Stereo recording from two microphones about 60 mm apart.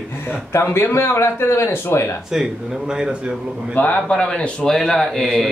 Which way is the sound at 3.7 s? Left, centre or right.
Left.